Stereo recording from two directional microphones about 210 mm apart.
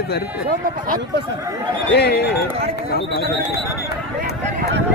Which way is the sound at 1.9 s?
50° left (ahead or behind).